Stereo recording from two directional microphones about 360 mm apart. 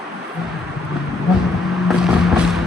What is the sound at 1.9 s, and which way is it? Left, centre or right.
Vehicle, centre.